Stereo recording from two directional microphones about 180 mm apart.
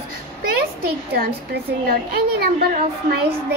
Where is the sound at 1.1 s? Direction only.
60° right (ahead or behind).